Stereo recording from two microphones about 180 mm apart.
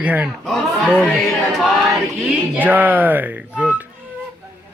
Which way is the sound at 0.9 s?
5° left (ahead or behind).